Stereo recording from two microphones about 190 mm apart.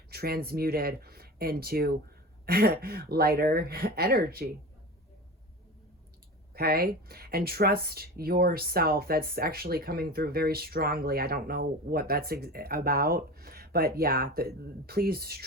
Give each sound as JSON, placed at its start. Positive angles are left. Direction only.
{"t": 0.1, "sound": "speech", "side_deg": -55}
{"t": 6.5, "sound": "speech", "side_deg": -55}